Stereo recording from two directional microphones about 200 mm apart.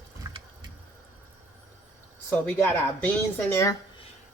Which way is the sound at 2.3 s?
10° left (ahead or behind).